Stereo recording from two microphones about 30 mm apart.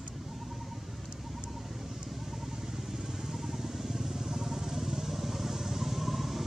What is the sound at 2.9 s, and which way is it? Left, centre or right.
Vehicle, centre.